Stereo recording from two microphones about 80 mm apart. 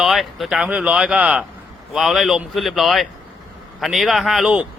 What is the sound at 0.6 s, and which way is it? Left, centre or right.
Speech, centre.